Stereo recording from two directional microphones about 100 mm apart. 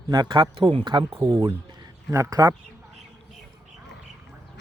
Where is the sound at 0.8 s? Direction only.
55° right (ahead or behind).